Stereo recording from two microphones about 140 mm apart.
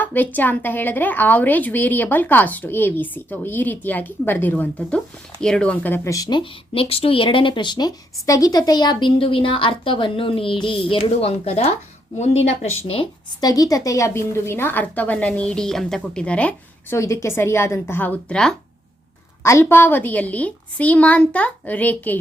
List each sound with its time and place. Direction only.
0.0 s a woman's voice: 10° left (ahead or behind); by 12.7 s 50° left (ahead or behind)
13.4 s a woman's voice: 25° left (ahead or behind); by 17.0 s 10° left (ahead or behind)
17.0 s a woman's voice: 20° left (ahead or behind); by 18.5 s 5° left (ahead or behind)
19.4 s a woman's voice: 20° left (ahead or behind)